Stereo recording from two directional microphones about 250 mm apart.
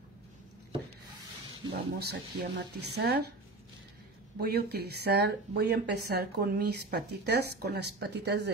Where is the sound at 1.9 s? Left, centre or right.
Right.